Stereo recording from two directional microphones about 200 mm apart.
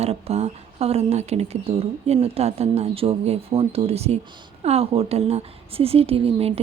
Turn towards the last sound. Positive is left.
turn(degrees=-30)  # may be behind; listen again after turning